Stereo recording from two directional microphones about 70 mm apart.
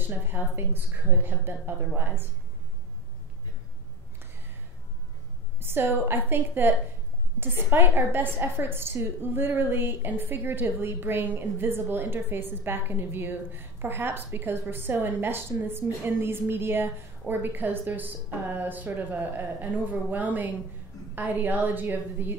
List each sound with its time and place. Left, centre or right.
0.0 s a woman's voice: right
5.6 s a woman's voice: right